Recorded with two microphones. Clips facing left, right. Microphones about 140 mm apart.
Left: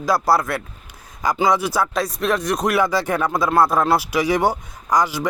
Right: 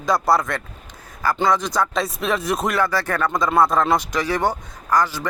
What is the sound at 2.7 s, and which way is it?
Speech, 15° left (ahead or behind).